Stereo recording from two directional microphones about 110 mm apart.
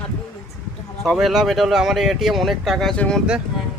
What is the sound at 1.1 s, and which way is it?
Speech, 5° right (ahead or behind).